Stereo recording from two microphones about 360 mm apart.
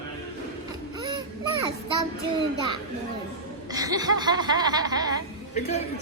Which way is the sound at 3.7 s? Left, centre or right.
Centre.